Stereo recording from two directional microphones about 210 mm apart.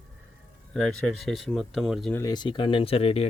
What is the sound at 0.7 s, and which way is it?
Speech, centre (ahead or behind).